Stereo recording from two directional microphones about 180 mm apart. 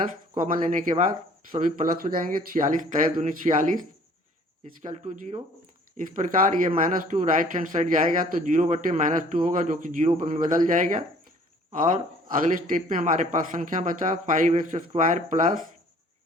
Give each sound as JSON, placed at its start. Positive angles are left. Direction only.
{"t": 0.1, "sound": "speech", "side_deg": -45}
{"t": 12.5, "sound": "speech", "side_deg": -45}